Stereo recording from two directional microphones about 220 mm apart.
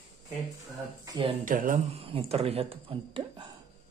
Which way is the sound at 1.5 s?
35° right (ahead or behind).